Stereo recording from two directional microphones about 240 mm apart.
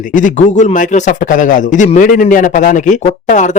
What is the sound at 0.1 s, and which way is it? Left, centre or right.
A man's voice, left.